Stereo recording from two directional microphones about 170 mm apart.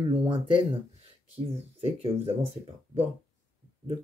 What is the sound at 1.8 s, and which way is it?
Speech, 35° right (ahead or behind).